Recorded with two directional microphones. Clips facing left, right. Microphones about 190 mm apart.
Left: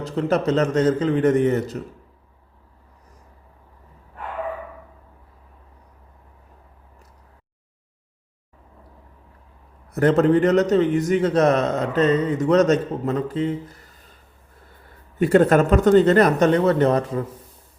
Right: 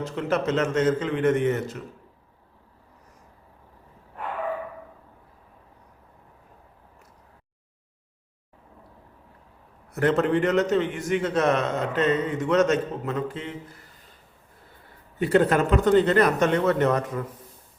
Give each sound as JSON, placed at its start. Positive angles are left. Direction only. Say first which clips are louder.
{"t": 0.0, "sound": "a man's voice", "louder": "left 4 dB", "side_deg": 35}
{"t": 9.9, "sound": "a man's voice", "louder": "left 5 dB", "side_deg": 40}
{"t": 15.3, "sound": "speech", "louder": "left 4 dB", "side_deg": 45}